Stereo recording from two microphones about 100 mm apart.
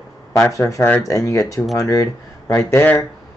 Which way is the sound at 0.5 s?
30° left (ahead or behind).